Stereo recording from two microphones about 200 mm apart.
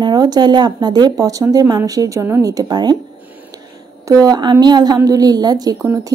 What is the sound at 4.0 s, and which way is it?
A woman's voice, 15° right (ahead or behind).